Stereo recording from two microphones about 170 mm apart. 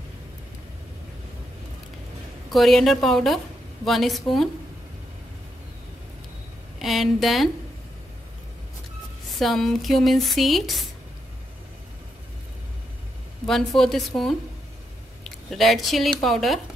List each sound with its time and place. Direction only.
2.5 s speech: centre (ahead or behind)
6.8 s speech: centre (ahead or behind)
9.4 s speech: centre (ahead or behind)
13.5 s speech: centre (ahead or behind)